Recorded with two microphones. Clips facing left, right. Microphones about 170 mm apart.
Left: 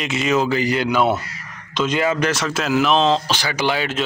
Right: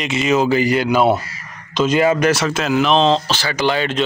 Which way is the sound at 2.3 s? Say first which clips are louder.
Right 3 dB; 5° right (ahead or behind).